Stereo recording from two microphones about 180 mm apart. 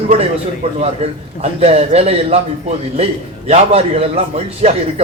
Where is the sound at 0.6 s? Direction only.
35° right (ahead or behind).